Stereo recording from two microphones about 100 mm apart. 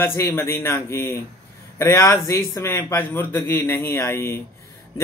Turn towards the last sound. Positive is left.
turn(degrees=30)  # may be behind; listen again after turning